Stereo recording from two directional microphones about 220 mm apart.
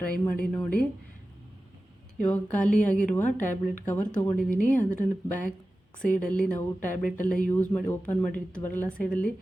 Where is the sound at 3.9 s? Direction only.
5° left (ahead or behind).